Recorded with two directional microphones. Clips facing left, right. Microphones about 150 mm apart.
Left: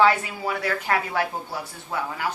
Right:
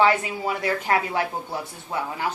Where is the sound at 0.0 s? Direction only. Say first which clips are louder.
Even; 20° right (ahead or behind).